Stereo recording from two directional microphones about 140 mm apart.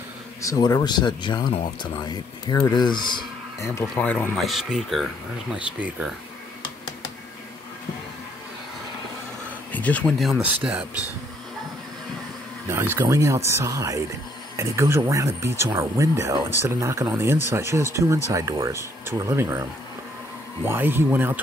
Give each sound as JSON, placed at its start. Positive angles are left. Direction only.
{"t": 0.4, "sound": "speech", "side_deg": 25}
{"t": 3.9, "sound": "speech", "side_deg": 10}
{"t": 4.5, "sound": "speech", "side_deg": -5}
{"t": 9.7, "sound": "a sound", "side_deg": 10}
{"t": 10.1, "sound": "speech", "side_deg": 0}
{"t": 12.6, "sound": "speech", "side_deg": -15}
{"t": 20.6, "sound": "speech", "side_deg": -15}